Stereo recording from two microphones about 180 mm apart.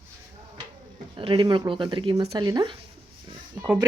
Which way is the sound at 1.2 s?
30° right (ahead or behind).